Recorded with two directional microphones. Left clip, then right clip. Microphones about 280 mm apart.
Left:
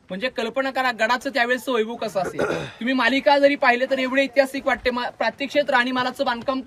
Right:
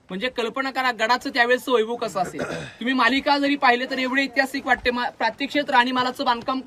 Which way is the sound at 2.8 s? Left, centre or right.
Centre.